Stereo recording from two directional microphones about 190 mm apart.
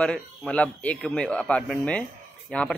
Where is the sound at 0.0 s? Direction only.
5° left (ahead or behind).